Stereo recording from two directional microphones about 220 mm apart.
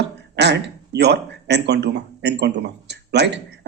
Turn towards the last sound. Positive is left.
turn(degrees=-50)  # may be behind; listen again after turning